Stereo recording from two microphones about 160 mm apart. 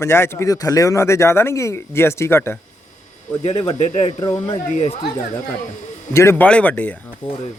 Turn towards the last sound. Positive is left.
turn(degrees=30)  # may be behind; listen again after turning